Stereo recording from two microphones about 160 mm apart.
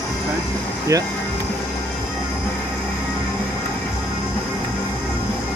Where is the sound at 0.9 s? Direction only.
20° right (ahead or behind).